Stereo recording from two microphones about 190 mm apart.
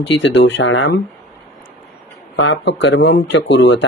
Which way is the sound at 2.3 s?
70° left (ahead or behind).